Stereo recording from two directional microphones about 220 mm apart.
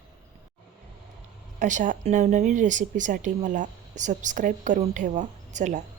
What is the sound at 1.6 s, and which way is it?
Speech, 35° right (ahead or behind).